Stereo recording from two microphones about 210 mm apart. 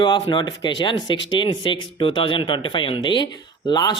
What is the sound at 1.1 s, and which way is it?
Speech, 60° left (ahead or behind).